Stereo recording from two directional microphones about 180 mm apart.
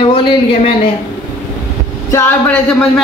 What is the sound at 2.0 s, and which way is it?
Speech, 15° left (ahead or behind).